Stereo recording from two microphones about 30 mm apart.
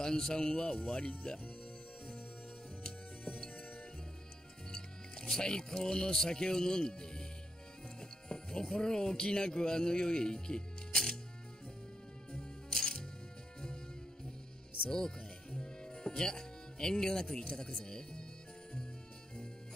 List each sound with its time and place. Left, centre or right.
0.0 s a man's voice: left
2.8 s music: left
4.7 s music: left
5.3 s a man's voice: left
8.0 s music: left
8.7 s a man's voice: left
12.8 s music: left
14.9 s a man's voice: left